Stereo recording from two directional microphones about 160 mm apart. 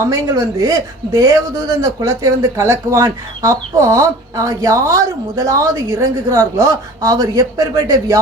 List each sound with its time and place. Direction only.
0.0 s a man's voice: 20° right (ahead or behind)